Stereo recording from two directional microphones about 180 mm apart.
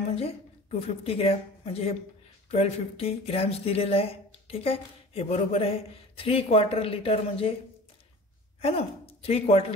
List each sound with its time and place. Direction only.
0.1 s a woman's voice: 35° left (ahead or behind)
8.5 s a woman's voice: 35° left (ahead or behind)